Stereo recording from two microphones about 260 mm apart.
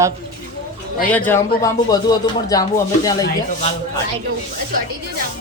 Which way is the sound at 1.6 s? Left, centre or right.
Centre.